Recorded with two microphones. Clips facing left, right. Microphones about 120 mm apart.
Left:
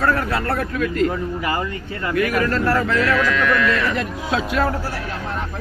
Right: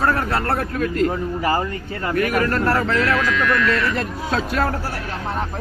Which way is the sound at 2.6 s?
30° right (ahead or behind).